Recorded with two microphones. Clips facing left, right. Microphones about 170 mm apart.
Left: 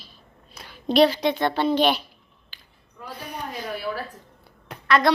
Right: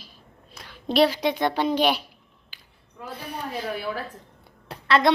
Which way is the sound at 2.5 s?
10° right (ahead or behind).